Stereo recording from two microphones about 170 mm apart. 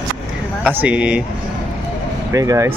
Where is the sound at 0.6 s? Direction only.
10° right (ahead or behind).